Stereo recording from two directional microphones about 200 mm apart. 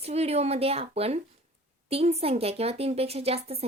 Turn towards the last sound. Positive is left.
turn(degrees=-30)  # may be behind; listen again after turning